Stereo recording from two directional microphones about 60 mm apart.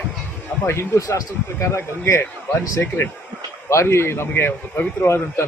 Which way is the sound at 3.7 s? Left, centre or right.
Left.